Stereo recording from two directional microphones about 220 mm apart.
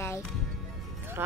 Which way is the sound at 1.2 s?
10° right (ahead or behind).